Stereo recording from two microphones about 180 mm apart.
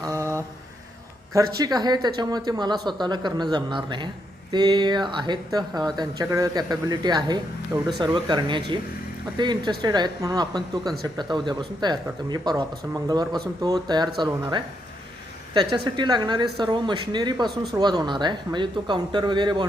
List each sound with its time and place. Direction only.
0.0 s mantra: 15° right (ahead or behind)
1.5 s speech: 20° right (ahead or behind)
17.4 s speech: centre (ahead or behind)
17.7 s speech: 20° right (ahead or behind)